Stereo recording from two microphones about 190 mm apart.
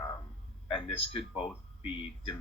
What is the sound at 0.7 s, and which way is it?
Speech, 30° left (ahead or behind).